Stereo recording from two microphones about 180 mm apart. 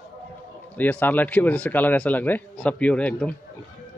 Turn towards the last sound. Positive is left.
turn(degrees=5)  # may be behind; listen again after turning